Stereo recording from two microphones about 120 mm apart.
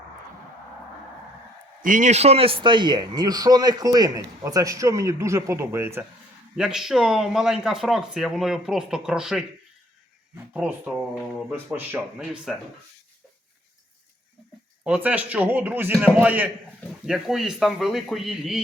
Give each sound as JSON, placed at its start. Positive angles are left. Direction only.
{"t": 1.8, "sound": "a man's voice", "side_deg": -90}
{"t": 6.6, "sound": "a man's voice", "side_deg": -5}
{"t": 14.8, "sound": "a man's voice", "side_deg": -10}
{"t": 17.1, "sound": "speech", "side_deg": -5}